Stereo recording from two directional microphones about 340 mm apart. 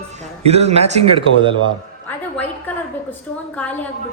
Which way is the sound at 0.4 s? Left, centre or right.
Centre.